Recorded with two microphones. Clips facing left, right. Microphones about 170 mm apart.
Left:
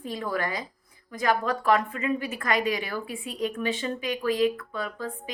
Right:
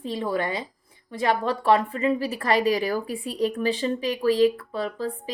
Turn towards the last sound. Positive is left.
turn(degrees=-35)  # may be behind; listen again after turning